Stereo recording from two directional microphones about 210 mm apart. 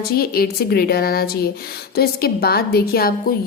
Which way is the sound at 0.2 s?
45° left (ahead or behind).